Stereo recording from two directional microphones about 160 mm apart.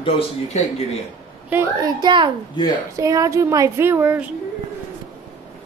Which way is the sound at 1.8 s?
25° right (ahead or behind).